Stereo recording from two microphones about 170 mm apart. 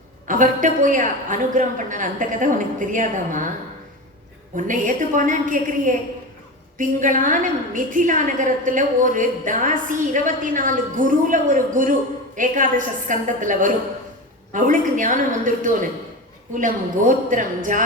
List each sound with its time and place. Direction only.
0.3 s a woman's voice: 50° right (ahead or behind)
4.5 s a woman's voice: 50° right (ahead or behind)